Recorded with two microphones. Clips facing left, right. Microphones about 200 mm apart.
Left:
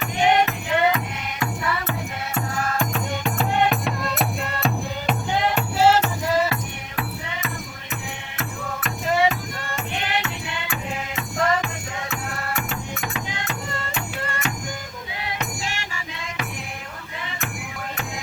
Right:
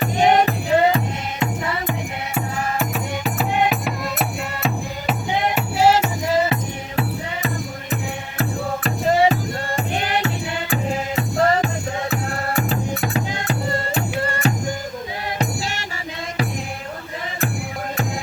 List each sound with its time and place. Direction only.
0.0 s music: 35° right (ahead or behind)
1.9 s music: 5° right (ahead or behind)
5.5 s music: 15° right (ahead or behind)
6.2 s music: 25° right (ahead or behind)
8.4 s music: 35° right (ahead or behind)